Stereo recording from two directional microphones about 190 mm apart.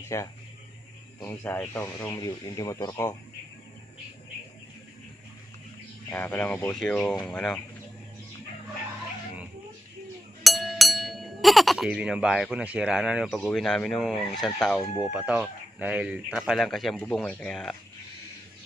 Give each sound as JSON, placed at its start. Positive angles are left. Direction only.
{"t": 0.1, "sound": "speech", "side_deg": 15}
{"t": 6.0, "sound": "speech", "side_deg": 10}
{"t": 10.4, "sound": "a sound", "side_deg": 0}
{"t": 13.4, "sound": "speech", "side_deg": 5}